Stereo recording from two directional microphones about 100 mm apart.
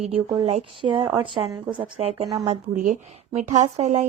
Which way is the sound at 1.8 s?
85° right.